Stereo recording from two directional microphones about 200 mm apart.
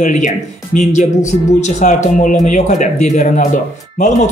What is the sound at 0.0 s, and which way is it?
Speech, 40° left (ahead or behind).